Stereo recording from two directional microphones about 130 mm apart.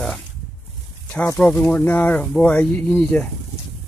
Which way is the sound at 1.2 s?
15° left (ahead or behind).